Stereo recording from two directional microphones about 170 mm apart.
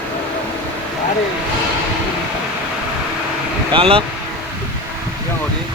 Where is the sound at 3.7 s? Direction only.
30° right (ahead or behind).